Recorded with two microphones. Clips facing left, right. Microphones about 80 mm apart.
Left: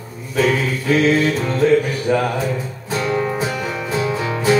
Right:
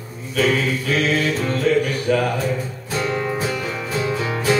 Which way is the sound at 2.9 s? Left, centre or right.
Centre.